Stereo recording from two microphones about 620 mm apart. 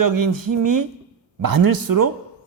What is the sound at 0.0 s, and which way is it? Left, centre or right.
Speech, right.